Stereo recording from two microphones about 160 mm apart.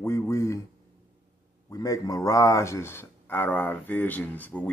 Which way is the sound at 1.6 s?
20° left (ahead or behind).